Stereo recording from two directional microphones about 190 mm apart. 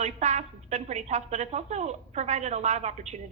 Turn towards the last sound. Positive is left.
turn(degrees=-35)  # may be behind; listen again after turning